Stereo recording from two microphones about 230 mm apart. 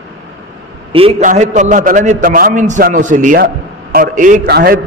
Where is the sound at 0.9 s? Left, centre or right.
Right.